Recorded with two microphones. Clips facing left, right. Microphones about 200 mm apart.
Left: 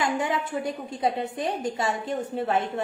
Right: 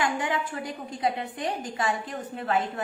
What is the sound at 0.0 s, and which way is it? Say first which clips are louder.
Speech: left 2 dB; 25° left (ahead or behind).